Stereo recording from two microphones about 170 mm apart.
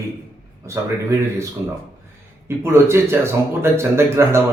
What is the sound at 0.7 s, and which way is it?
Speech, 15° right (ahead or behind).